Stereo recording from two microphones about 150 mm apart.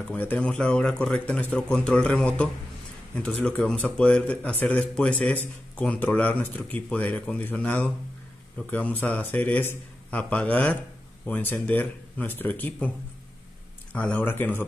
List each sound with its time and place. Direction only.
0.0 s speech: 10° left (ahead or behind)
13.9 s speech: 10° left (ahead or behind)